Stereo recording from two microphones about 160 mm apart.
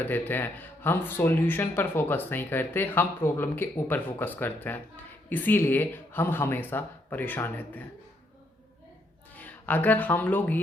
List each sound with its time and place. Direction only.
0.0 s speech: 10° left (ahead or behind)
9.3 s speech: 10° left (ahead or behind)